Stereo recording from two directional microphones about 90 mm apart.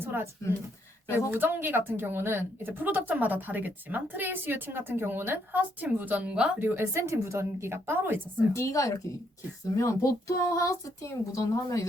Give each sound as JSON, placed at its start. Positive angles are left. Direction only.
{"t": 0.0, "sound": "speech", "side_deg": -25}
{"t": 1.0, "sound": "speech", "side_deg": 30}
{"t": 1.3, "sound": "speech", "side_deg": -20}
{"t": 6.6, "sound": "speech", "side_deg": -25}
{"t": 8.5, "sound": "speech", "side_deg": 35}